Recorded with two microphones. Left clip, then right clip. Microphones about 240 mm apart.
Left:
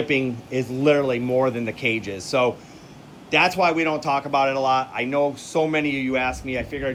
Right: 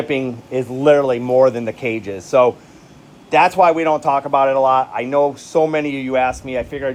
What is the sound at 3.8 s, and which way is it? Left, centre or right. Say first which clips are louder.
Speech: right 7 dB; right.